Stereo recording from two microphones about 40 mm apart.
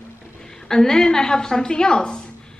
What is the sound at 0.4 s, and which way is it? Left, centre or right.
A woman's voice, centre.